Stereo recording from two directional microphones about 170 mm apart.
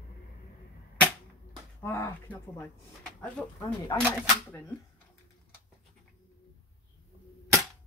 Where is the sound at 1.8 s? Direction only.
15° left (ahead or behind).